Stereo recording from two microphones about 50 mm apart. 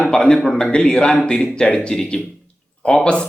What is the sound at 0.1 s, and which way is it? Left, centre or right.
A man's voice, centre.